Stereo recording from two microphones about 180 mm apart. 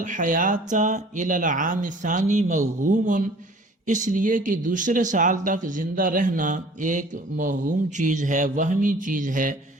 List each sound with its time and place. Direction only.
0.0 s speech: 45° right (ahead or behind)